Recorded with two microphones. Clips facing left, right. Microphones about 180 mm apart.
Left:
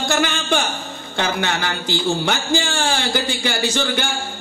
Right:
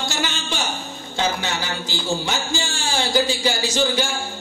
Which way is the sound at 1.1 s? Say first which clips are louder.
Left 2 dB; 60° left (ahead or behind).